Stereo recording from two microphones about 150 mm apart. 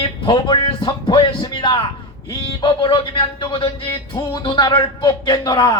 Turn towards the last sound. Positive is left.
turn(degrees=30)  # may be behind; listen again after turning